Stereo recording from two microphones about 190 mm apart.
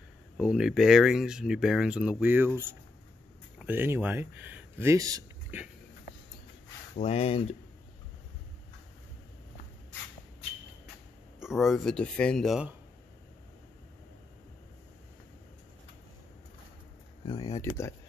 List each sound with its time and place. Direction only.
0.4 s speech: 5° right (ahead or behind); by 5.6 s 20° right (ahead or behind)
7.0 s speech: 30° left (ahead or behind)
11.3 s speech: centre (ahead or behind)
17.3 s speech: 30° left (ahead or behind)